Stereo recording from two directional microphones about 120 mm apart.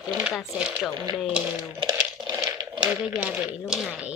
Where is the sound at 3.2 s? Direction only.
10° right (ahead or behind).